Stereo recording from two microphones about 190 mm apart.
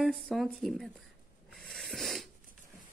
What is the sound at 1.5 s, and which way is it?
Snort, centre (ahead or behind).